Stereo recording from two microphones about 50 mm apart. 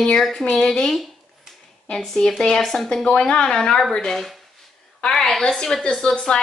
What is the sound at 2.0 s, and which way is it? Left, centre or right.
Speech, centre.